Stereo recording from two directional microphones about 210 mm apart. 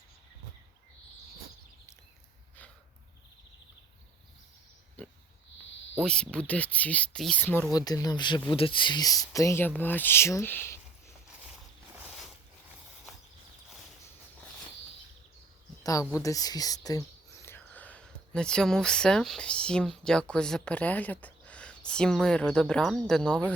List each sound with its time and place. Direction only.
5.0 s pig: 5° left (ahead or behind)
6.0 s speech: 5° left (ahead or behind)
15.8 s speech: 15° left (ahead or behind)